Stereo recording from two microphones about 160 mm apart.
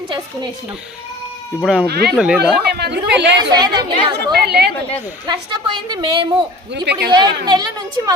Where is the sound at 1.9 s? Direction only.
80° right.